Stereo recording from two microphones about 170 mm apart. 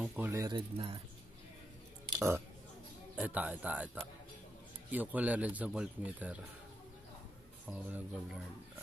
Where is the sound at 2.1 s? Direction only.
15° right (ahead or behind).